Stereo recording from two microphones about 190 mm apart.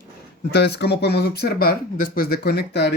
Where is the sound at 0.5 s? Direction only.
60° left (ahead or behind).